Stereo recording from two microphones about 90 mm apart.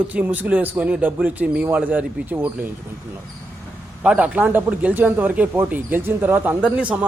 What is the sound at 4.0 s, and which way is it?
A man's voice, 15° right (ahead or behind).